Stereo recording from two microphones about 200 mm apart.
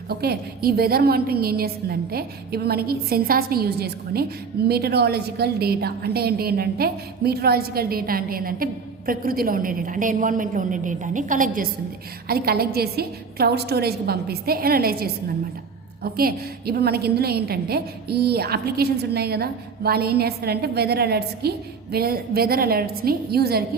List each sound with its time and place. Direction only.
0.1 s a woman's voice: 50° right (ahead or behind)
16.1 s a woman's voice: 50° right (ahead or behind)